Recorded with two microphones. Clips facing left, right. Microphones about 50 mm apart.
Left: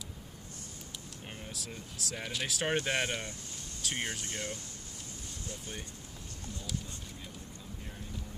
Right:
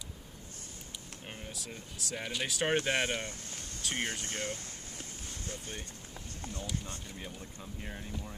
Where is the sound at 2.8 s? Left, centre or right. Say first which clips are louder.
Right 1 dB; centre.